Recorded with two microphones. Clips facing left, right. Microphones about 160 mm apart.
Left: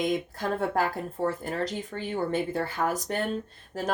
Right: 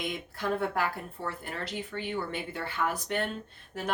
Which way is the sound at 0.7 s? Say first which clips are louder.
Left 4 dB; 40° left (ahead or behind).